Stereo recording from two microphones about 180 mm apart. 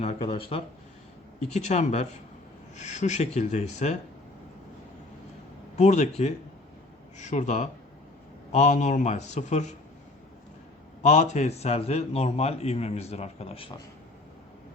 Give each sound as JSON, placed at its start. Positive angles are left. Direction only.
{"t": 0.0, "sound": "speech", "side_deg": 35}
{"t": 5.7, "sound": "speech", "side_deg": 40}
{"t": 11.0, "sound": "speech", "side_deg": 40}